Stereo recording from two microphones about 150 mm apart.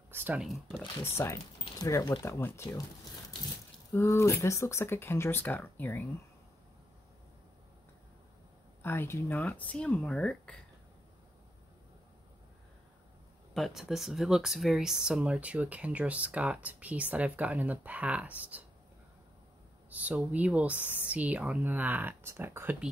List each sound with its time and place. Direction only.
0.1 s a sound: 15° right (ahead or behind)
0.4 s speech: centre (ahead or behind)
1.1 s speech: 20° left (ahead or behind)
3.9 s speech: 20° left (ahead or behind)
8.8 s speech: 15° left (ahead or behind)
13.5 s speech: centre (ahead or behind)
19.9 s speech: 10° right (ahead or behind)